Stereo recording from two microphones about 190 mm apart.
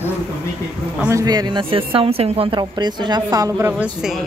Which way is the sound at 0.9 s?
15° right (ahead or behind).